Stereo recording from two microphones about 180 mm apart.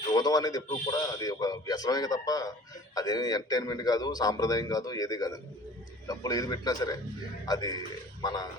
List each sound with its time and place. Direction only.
0.1 s a man's voice: 20° left (ahead or behind)